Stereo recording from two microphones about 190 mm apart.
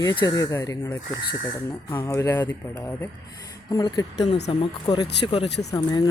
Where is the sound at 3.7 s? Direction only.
20° left (ahead or behind).